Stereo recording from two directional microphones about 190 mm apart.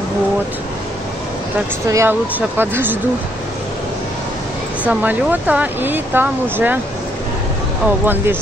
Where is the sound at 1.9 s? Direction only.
15° right (ahead or behind).